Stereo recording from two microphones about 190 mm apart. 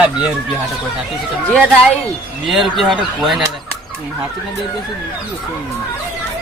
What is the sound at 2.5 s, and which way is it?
Speech, centre (ahead or behind).